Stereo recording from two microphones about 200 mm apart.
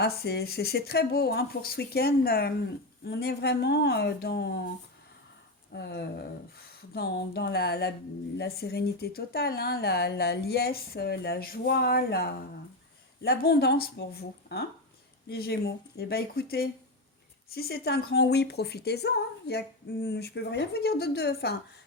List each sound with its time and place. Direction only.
0.0 s speech: 50° left (ahead or behind)
5.7 s speech: 55° left (ahead or behind)